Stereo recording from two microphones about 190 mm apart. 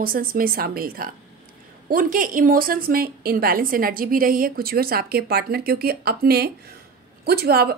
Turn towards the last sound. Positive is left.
turn(degrees=-55)  # may be behind; listen again after turning